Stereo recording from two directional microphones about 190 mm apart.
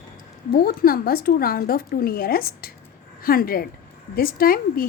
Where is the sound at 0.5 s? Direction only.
50° left (ahead or behind).